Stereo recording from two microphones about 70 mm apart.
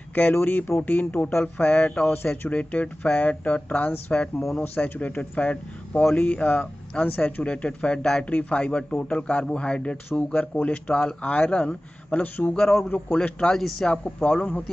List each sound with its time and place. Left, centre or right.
0.1 s speech: left
4.4 s speech: centre
4.7 s speech: left
12.5 s speech: centre
12.9 s speech: left
13.4 s speech: centre